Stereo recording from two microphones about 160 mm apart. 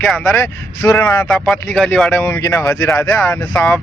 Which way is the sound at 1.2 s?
5° left (ahead or behind).